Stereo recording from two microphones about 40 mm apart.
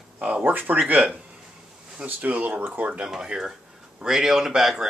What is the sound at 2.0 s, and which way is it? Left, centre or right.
Speech, right.